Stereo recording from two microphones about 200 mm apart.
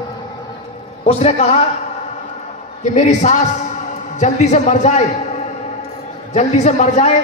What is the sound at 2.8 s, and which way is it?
A man's voice, 35° left (ahead or behind).